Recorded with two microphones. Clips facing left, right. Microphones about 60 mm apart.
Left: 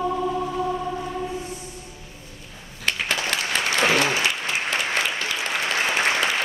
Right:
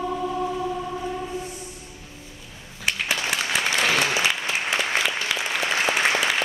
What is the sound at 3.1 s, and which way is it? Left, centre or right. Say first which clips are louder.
Applause: even; centre.